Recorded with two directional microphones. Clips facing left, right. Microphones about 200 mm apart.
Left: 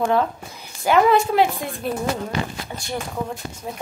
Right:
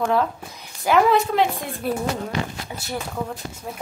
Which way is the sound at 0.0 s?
Centre (ahead or behind).